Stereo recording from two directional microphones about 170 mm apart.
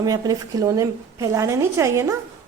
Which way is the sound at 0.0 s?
20° right (ahead or behind).